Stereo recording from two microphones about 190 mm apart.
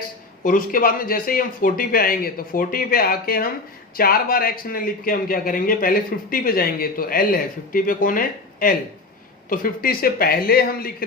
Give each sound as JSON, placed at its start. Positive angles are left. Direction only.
{"t": 0.4, "sound": "a man's voice", "side_deg": 45}